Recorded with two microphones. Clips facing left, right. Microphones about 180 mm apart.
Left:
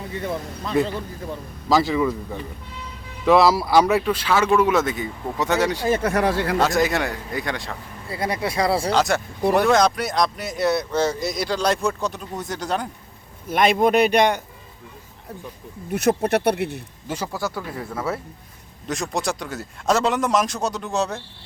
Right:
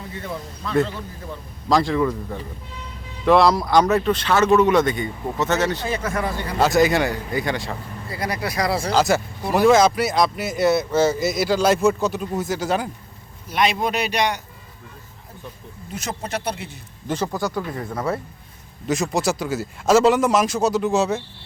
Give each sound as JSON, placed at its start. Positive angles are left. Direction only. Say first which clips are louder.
{"t": 0.6, "sound": "speech", "louder": "right 1 dB", "side_deg": 15}
{"t": 1.7, "sound": "speech", "louder": "even", "side_deg": 5}
{"t": 5.8, "sound": "speech", "louder": "left 5 dB", "side_deg": 50}
{"t": 6.6, "sound": "speech", "louder": "right 7 dB", "side_deg": 0}
{"t": 8.1, "sound": "speech", "louder": "left 2 dB", "side_deg": 25}
{"t": 8.9, "sound": "speech", "louder": "right 2 dB", "side_deg": 0}
{"t": 13.5, "sound": "speech", "louder": "left 4 dB", "side_deg": 50}
{"t": 15.9, "sound": "speech", "louder": "left 9 dB", "side_deg": 60}
{"t": 17.1, "sound": "speech", "louder": "right 3 dB", "side_deg": 5}